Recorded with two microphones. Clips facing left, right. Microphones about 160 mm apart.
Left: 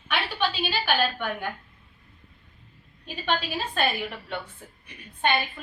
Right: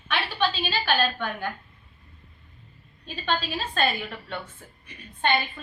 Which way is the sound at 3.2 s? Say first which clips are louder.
Even; 15° left (ahead or behind).